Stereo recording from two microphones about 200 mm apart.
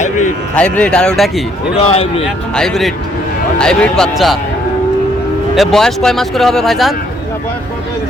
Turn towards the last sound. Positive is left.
turn(degrees=0)  # may be behind; listen again after turning